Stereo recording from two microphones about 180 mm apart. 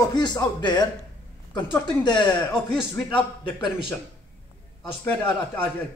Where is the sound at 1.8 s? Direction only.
25° left (ahead or behind).